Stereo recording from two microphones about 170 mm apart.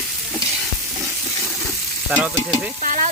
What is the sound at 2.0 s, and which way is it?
Stir, 10° right (ahead or behind).